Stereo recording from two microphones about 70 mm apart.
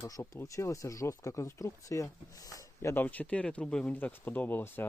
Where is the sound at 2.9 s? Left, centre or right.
Left.